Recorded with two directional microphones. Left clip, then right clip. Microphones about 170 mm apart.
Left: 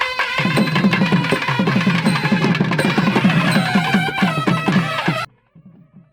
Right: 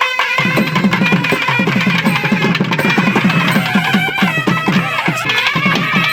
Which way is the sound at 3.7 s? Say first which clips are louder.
Right 4 dB; 5° right (ahead or behind).